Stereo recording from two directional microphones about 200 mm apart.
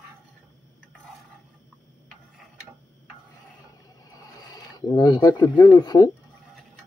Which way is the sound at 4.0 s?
20° left (ahead or behind).